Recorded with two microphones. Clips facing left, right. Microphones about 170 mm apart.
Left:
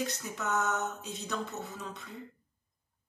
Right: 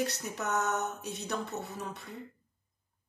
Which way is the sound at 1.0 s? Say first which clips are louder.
Right 2 dB; 65° right (ahead or behind).